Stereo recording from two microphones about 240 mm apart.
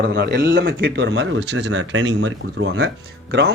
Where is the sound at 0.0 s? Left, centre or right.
Right.